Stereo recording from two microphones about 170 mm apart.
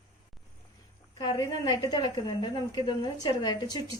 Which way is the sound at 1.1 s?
20° left (ahead or behind).